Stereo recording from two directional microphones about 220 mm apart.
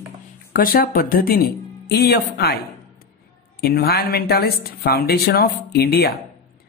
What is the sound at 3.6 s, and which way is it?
A woman's voice, 45° left (ahead or behind).